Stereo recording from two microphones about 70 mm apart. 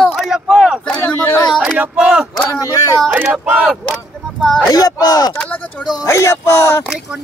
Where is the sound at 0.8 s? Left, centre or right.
Left.